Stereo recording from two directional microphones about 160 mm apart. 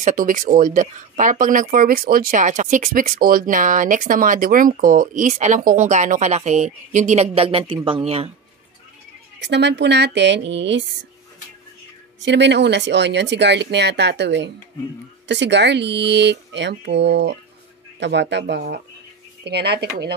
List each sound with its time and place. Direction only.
0.0 s speech: 55° right (ahead or behind); by 8.3 s 35° right (ahead or behind)
9.4 s speech: 90° right
12.2 s speech: 90° right